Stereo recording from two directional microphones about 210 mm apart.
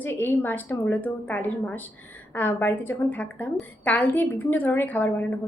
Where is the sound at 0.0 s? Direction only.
10° left (ahead or behind).